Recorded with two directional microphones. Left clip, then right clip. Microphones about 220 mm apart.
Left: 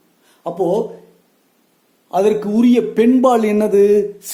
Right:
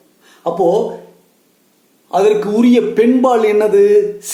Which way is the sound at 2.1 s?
45° left (ahead or behind).